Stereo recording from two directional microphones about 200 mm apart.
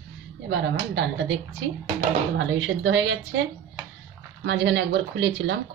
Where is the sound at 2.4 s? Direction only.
65° right (ahead or behind).